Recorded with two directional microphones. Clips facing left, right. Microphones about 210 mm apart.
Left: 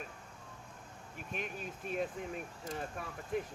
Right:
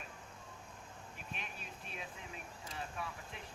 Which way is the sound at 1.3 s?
45° left (ahead or behind).